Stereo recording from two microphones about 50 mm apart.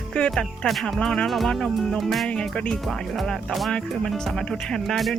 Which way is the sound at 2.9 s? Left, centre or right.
Centre.